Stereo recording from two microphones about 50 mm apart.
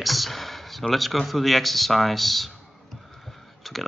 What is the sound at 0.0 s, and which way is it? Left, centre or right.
A man's voice, centre.